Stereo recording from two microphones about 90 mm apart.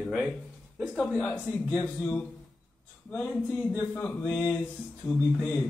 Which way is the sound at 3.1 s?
20° left (ahead or behind).